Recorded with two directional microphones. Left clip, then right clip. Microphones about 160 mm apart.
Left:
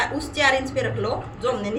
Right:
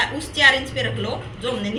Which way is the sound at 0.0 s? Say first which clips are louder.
Right 4 dB; 30° left (ahead or behind).